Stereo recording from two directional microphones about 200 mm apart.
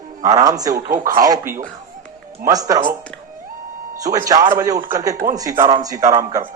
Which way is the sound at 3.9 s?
15° right (ahead or behind).